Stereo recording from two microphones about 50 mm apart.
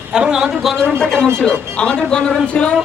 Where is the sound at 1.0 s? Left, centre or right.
Centre.